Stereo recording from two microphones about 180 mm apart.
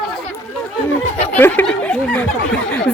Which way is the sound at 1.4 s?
10° left (ahead or behind).